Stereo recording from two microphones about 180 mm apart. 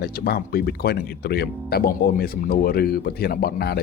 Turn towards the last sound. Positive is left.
turn(degrees=60)  # may be behind; listen again after turning